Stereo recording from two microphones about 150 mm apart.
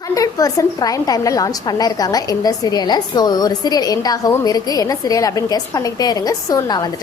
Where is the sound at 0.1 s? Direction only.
25° left (ahead or behind).